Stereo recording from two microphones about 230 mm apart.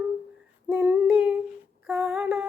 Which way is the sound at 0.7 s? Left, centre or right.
Centre.